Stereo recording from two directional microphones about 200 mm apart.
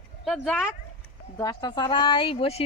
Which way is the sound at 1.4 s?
20° left (ahead or behind).